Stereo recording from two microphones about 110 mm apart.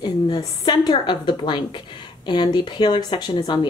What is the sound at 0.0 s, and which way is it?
Speech, 40° left (ahead or behind).